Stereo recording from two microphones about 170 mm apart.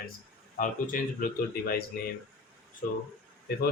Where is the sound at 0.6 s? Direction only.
55° left (ahead or behind).